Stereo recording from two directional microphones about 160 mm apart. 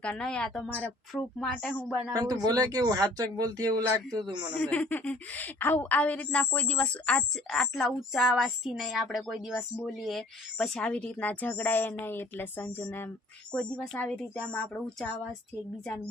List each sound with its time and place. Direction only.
0.0 s speech: 5° left (ahead or behind)
2.1 s speech: 25° right (ahead or behind)
4.5 s a woman's voice: 10° left (ahead or behind)